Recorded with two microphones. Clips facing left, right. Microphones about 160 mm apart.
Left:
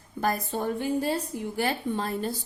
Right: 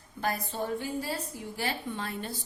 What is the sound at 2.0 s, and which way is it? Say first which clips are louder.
Speech: left 7 dB; 40° left (ahead or behind).